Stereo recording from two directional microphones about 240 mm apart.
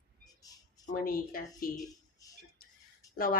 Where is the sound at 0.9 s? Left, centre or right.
Left.